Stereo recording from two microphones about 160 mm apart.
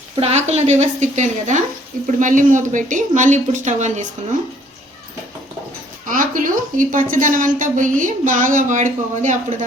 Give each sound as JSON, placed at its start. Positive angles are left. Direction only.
{"t": 0.2, "sound": "speech", "side_deg": -45}
{"t": 6.1, "sound": "a woman's voice", "side_deg": -55}